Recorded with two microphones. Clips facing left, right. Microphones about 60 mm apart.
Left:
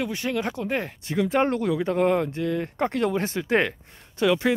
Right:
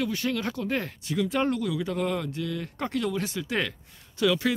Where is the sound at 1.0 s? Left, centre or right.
Left.